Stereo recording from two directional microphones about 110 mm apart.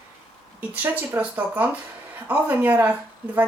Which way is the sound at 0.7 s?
15° right (ahead or behind).